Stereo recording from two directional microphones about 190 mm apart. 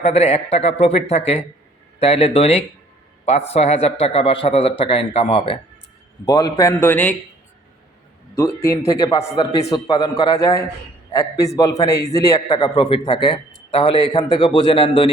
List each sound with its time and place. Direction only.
0.0 s a man's voice: 35° left (ahead or behind)
6.2 s a man's voice: 20° left (ahead or behind)
8.4 s a man's voice: 15° left (ahead or behind)